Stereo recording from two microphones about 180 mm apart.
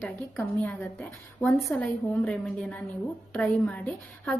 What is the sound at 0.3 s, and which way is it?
A woman's voice, 10° left (ahead or behind).